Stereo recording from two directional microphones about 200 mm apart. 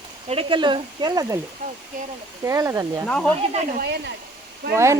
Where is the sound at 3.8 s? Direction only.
55° right (ahead or behind).